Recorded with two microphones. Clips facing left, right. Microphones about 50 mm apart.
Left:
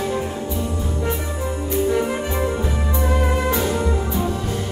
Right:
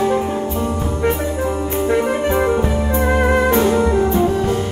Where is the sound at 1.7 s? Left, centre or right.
Right.